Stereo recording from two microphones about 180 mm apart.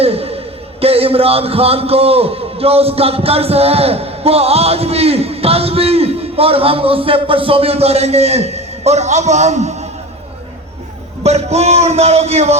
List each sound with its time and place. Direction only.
0.0 s a sound: 35° right (ahead or behind)
0.8 s a man's voice: 35° right (ahead or behind)
11.2 s a man's voice: 35° right (ahead or behind)